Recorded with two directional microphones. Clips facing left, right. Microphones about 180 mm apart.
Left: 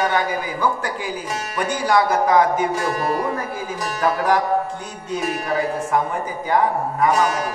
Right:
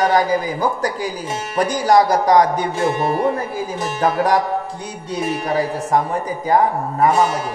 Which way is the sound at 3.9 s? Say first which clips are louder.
Right 2 dB; 30° right (ahead or behind).